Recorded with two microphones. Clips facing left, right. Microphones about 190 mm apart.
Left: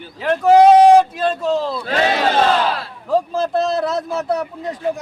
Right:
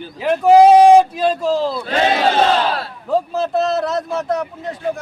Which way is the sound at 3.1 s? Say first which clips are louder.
Even; 5° right (ahead or behind).